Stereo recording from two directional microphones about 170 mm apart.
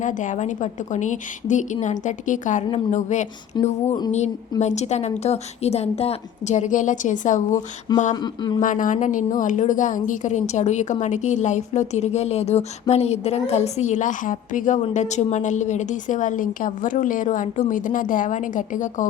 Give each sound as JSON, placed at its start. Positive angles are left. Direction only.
{"t": 0.0, "sound": "a woman's voice", "side_deg": 50}
{"t": 3.6, "sound": "a sound", "side_deg": 40}
{"t": 4.6, "sound": "a woman's voice", "side_deg": 40}
{"t": 8.1, "sound": "speech", "side_deg": 25}
{"t": 8.6, "sound": "a woman's voice", "side_deg": 50}